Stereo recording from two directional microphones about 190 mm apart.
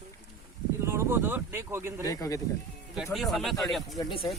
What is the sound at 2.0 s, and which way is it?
Speech, 15° left (ahead or behind).